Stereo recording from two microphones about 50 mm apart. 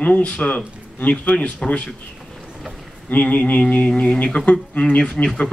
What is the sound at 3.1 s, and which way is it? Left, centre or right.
Speech, left.